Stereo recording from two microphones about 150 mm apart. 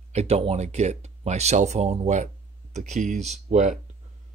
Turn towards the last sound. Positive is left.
turn(degrees=-50)  # may be behind; listen again after turning